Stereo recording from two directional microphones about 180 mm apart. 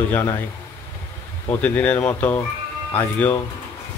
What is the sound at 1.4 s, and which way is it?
Speech, 10° left (ahead or behind).